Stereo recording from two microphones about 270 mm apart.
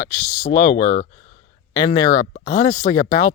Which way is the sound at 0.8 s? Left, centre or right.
Left.